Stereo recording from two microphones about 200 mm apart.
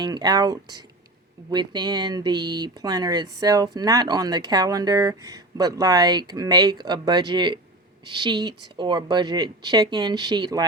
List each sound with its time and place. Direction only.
0.0 s speech: 20° right (ahead or behind)